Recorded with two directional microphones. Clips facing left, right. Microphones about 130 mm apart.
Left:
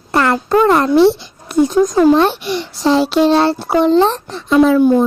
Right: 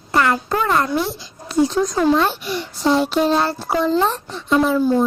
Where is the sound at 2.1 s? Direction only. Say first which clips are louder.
Left 5 dB; 70° left (ahead or behind).